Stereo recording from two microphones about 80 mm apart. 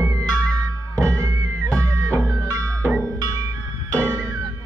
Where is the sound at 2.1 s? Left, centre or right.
Right.